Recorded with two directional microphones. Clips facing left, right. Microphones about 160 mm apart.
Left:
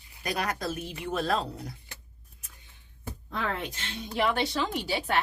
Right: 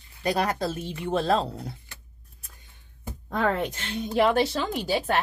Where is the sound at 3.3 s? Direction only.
45° right (ahead or behind).